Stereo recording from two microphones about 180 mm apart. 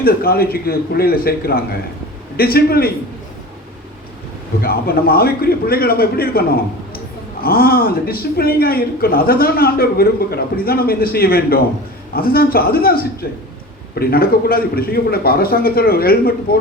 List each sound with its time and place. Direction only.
0.0 s a man's voice: 55° left (ahead or behind)
4.6 s a man's voice: 55° left (ahead or behind)